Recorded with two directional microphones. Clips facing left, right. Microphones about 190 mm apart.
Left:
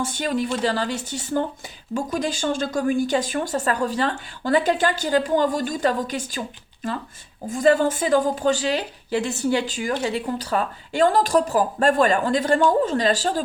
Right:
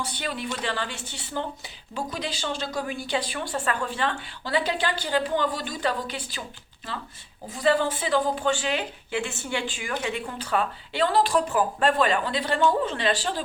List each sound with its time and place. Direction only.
0.0 s speech: 45° left (ahead or behind)
7.5 s speech: 45° left (ahead or behind)